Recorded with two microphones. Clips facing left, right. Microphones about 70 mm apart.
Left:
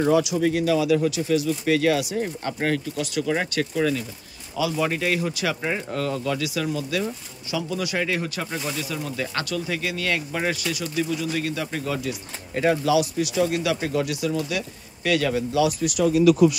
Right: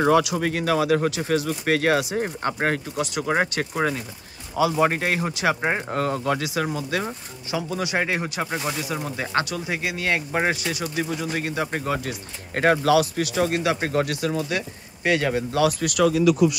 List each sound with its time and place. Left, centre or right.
0.0 s speech: right
7.8 s speech: right